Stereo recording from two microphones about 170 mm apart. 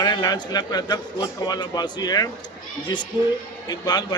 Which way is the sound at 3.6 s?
25° left (ahead or behind).